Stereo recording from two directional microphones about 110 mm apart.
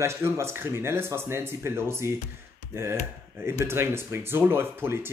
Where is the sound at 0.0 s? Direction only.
25° right (ahead or behind).